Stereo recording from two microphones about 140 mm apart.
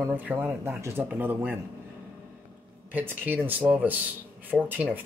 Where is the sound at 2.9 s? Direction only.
15° right (ahead or behind).